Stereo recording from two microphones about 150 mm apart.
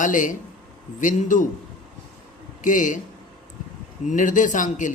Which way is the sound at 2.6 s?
60° left (ahead or behind).